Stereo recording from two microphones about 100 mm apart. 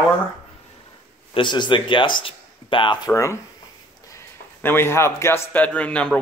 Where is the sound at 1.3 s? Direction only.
55° left (ahead or behind).